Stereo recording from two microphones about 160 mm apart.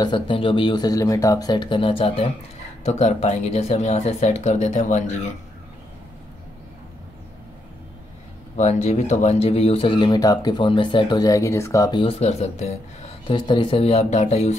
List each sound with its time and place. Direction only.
0.0 s speech: 30° left (ahead or behind)
2.8 s speech: 45° left (ahead or behind)
8.5 s speech: 45° left (ahead or behind); by 12.0 s 20° left (ahead or behind)
12.0 s speech: 40° left (ahead or behind)
13.5 s speech: 30° left (ahead or behind)